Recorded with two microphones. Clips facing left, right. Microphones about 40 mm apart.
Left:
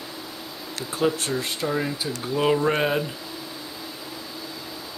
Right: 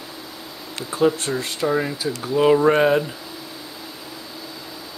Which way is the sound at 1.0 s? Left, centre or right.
Centre.